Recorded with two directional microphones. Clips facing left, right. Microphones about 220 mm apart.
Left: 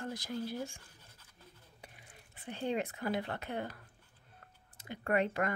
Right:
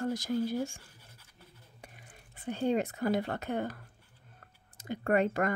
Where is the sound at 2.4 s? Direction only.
45° right (ahead or behind).